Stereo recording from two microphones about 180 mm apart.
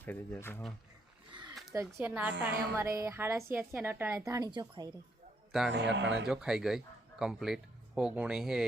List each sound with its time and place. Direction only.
0.0 s speech: 10° left (ahead or behind)
1.3 s a sound: 25° right (ahead or behind)
1.7 s a woman's voice: 15° right (ahead or behind)
5.5 s a man's voice: centre (ahead or behind)
5.7 s a man's voice: 85° right
6.2 s speech: 5° right (ahead or behind)